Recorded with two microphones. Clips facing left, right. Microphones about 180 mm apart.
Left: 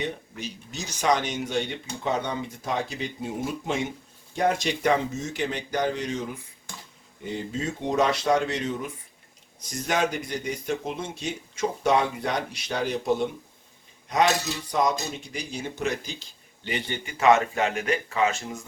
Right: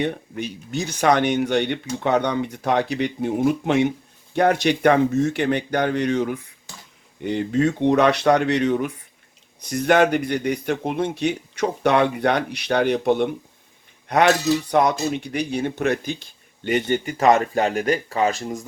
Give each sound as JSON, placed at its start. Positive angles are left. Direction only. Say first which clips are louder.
{"t": 0.0, "sound": "speech", "louder": "right 7 dB", "side_deg": -55}